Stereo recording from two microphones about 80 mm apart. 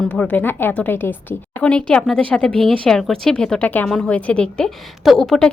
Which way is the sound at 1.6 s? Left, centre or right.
Centre.